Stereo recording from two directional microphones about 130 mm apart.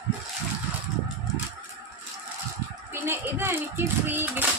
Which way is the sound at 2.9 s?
15° right (ahead or behind).